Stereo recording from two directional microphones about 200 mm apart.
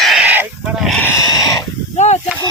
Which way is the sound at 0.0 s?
5° right (ahead or behind).